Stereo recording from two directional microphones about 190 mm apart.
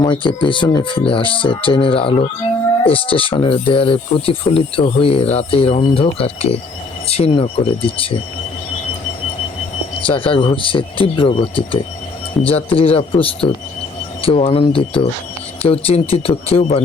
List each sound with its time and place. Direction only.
0.0 s speech: 25° left (ahead or behind)
10.2 s speech: 25° left (ahead or behind)